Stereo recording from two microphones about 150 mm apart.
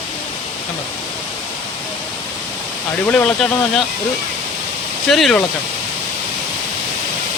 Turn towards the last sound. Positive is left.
turn(degrees=0)  # may be behind; listen again after turning